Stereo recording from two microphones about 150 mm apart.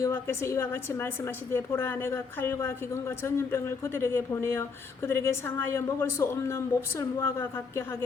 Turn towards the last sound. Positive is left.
turn(degrees=15)  # may be behind; listen again after turning